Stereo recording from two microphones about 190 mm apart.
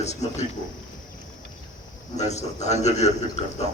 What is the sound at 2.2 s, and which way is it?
Speech, 35° left (ahead or behind).